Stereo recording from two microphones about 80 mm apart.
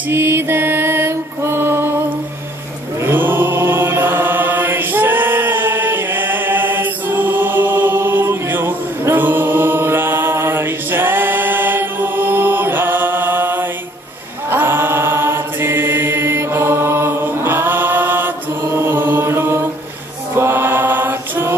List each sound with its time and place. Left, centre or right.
0.1 s mantra: right
3.0 s chant: right
20.3 s mantra: right